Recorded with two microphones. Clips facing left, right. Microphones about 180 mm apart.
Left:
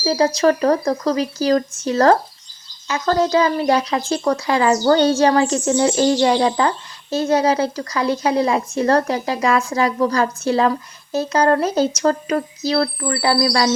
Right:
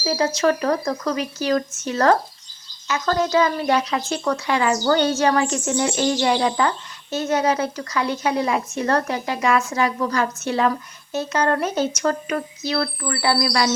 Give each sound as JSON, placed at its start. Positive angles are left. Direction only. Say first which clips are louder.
{"t": 0.0, "sound": "speech", "louder": "left 4 dB", "side_deg": 30}